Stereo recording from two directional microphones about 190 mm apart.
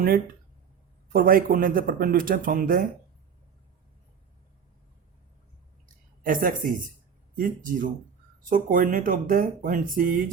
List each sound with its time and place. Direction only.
1.1 s speech: 50° right (ahead or behind)
6.2 s speech: 45° right (ahead or behind)